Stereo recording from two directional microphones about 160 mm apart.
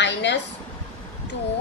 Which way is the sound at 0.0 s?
90° left.